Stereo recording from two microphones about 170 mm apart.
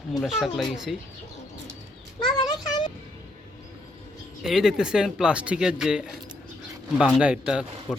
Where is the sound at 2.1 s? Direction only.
25° left (ahead or behind).